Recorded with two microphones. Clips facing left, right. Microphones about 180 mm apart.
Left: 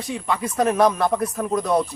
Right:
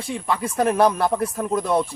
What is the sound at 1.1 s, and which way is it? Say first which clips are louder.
Speech: even; 30° right (ahead or behind).